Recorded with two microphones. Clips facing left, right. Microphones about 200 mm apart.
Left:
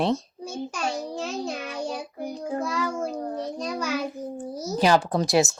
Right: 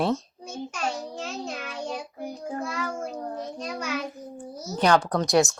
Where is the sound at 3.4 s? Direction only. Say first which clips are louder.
Left 4 dB; 35° left (ahead or behind).